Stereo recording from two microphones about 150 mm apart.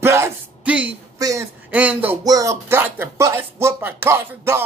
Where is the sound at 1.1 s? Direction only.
20° right (ahead or behind).